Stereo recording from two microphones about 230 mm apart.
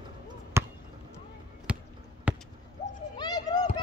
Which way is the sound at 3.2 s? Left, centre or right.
Centre.